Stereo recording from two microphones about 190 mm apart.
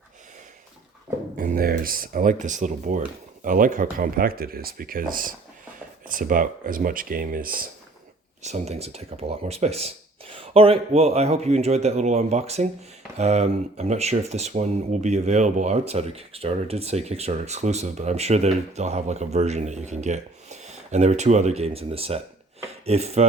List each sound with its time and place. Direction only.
1.4 s speech: 45° right (ahead or behind)
8.4 s speech: 35° right (ahead or behind)